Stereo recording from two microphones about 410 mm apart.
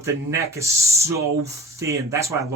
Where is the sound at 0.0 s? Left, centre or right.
Centre.